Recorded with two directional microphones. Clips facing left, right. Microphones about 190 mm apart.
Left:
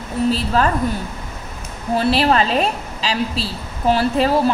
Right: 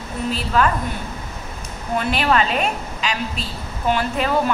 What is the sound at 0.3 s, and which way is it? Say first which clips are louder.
Speech: even; 35° left (ahead or behind).